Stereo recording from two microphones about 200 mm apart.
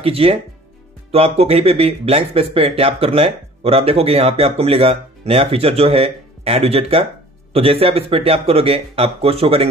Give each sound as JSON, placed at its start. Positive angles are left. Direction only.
{"t": 0.0, "sound": "speech", "side_deg": -30}